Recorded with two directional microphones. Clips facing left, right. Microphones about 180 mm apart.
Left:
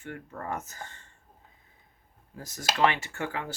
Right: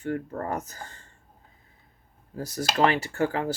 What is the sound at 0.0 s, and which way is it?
Speech, 40° right (ahead or behind).